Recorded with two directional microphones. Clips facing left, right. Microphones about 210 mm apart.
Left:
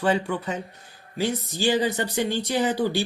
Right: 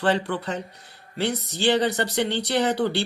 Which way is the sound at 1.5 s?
70° right (ahead or behind).